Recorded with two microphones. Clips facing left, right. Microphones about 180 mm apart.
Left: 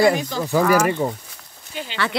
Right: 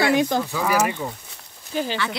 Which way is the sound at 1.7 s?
40° right (ahead or behind).